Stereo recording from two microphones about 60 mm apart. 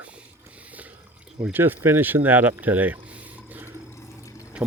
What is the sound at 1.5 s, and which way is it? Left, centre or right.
Speech, right.